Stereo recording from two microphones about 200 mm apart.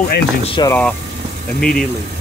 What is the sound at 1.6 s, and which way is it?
Speech, centre (ahead or behind).